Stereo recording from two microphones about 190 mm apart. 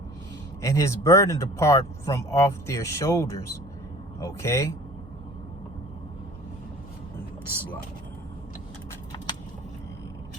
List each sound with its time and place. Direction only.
0.6 s speech: 15° left (ahead or behind)